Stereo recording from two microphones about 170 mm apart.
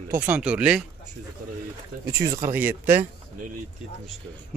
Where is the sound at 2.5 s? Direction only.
10° right (ahead or behind).